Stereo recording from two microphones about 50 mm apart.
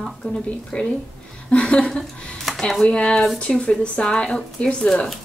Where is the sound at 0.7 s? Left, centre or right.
Left.